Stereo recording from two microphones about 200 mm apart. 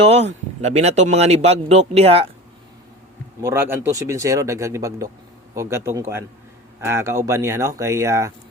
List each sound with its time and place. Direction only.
0.0 s speech: 35° right (ahead or behind)
3.4 s speech: 10° right (ahead or behind)